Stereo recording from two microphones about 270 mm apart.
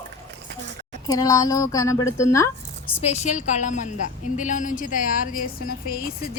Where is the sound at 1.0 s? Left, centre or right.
Centre.